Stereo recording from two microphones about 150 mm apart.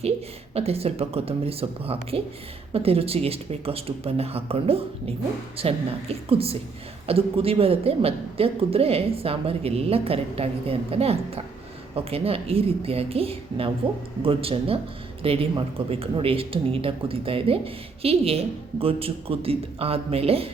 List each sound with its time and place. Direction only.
0.5 s a woman's voice: 40° right (ahead or behind)